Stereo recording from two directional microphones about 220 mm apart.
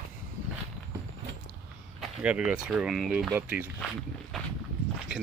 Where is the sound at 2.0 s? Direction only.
5° right (ahead or behind).